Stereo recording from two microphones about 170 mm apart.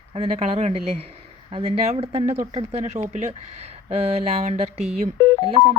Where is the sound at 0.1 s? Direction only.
35° right (ahead or behind).